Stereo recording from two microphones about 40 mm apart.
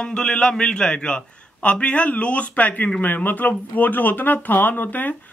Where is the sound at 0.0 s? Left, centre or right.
Left.